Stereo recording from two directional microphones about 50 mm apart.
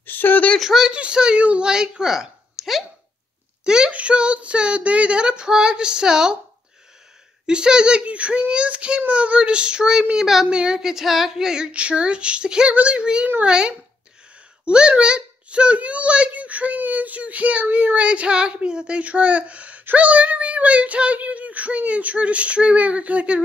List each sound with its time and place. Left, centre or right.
0.0 s a sound: left
0.6 s female singing: centre
0.9 s a child's voice: right; by 2.8 s centre
3.6 s speech: centre
7.4 s speech: centre
10.2 s female singing: centre
12.7 s speech: right
13.5 s female singing: centre
14.6 s a child's voice: right